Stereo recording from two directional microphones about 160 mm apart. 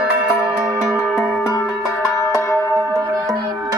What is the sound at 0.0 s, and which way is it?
Music, 5° right (ahead or behind).